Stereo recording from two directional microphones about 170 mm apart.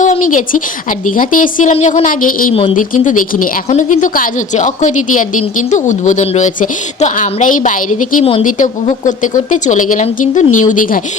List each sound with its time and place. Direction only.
0.0 s a woman's voice: 50° left (ahead or behind)
1.7 s a woman's voice: 40° left (ahead or behind)
8.2 s speech: 35° left (ahead or behind)
8.4 s a woman's voice: 50° left (ahead or behind)